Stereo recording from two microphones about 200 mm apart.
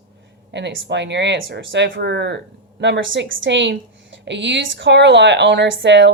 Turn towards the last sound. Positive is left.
turn(degrees=-65)  # may be behind; listen again after turning